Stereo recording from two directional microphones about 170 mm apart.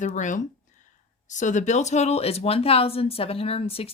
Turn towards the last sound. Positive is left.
turn(degrees=35)  # may be behind; listen again after turning